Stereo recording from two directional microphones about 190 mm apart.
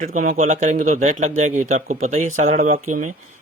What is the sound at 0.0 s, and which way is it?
Speech, 45° right (ahead or behind).